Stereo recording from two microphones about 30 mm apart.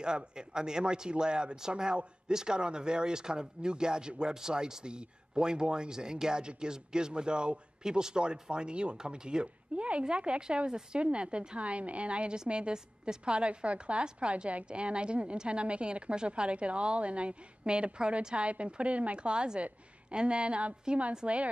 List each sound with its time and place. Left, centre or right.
0.0 s a woman's voice: right
19.1 s a woman's voice: right